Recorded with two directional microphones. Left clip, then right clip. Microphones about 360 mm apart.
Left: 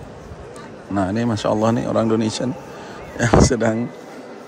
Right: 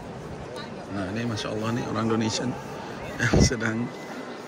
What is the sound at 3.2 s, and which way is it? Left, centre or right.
Speech, centre.